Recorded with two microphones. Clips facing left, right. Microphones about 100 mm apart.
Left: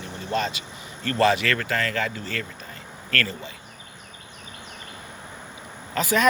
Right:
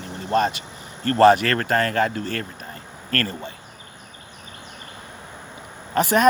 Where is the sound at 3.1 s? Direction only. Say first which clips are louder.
Right 2 dB; 40° right (ahead or behind).